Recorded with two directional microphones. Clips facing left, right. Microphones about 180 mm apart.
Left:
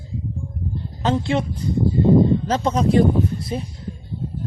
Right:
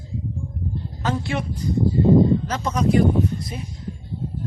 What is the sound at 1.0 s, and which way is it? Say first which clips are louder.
Speech: left 5 dB; 25° left (ahead or behind).